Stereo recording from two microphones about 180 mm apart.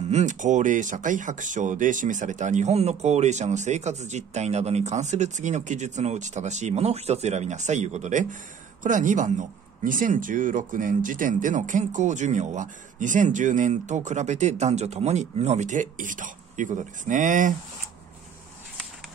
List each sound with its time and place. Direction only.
0.1 s speech: 40° right (ahead or behind)